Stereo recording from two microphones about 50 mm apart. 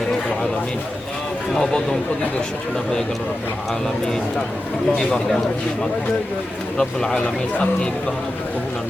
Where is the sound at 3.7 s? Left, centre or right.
Centre.